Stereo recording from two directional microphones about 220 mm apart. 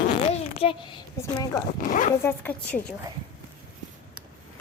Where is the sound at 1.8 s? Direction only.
35° left (ahead or behind).